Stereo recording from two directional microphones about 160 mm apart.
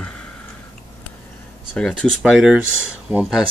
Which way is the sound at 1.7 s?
5° left (ahead or behind).